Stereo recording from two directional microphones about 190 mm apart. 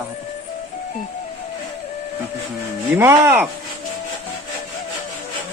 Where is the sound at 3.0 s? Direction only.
15° right (ahead or behind).